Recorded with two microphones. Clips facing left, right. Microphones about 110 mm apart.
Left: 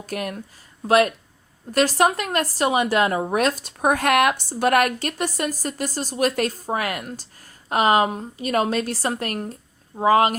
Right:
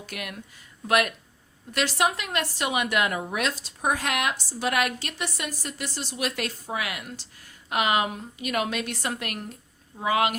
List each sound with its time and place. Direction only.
0.0 s speech: 40° left (ahead or behind)